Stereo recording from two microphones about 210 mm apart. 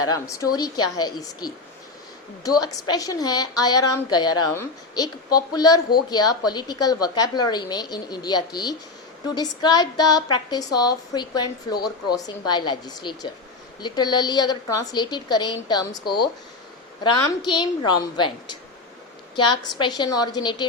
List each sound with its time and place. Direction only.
0.1 s a woman's voice: 15° left (ahead or behind)
2.6 s a woman's voice: 20° left (ahead or behind)
17.0 s a woman's voice: 20° left (ahead or behind)
19.8 s a woman's voice: 20° left (ahead or behind)